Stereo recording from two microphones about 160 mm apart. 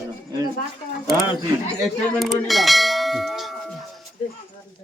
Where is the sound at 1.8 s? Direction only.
Centre (ahead or behind).